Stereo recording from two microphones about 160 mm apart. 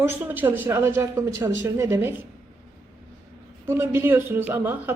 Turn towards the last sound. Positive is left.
turn(degrees=-10)  # may be behind; listen again after turning